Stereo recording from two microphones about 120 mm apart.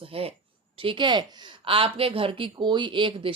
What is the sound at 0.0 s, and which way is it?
Speech, 50° right (ahead or behind).